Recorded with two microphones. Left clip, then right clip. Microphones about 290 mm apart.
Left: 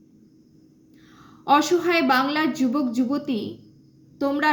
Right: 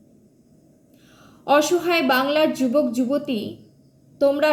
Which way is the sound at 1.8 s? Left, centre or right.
Centre.